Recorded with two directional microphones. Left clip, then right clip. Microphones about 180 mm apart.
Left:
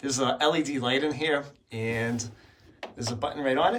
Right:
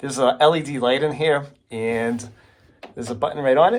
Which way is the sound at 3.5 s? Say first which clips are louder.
Right 9 dB; 15° right (ahead or behind).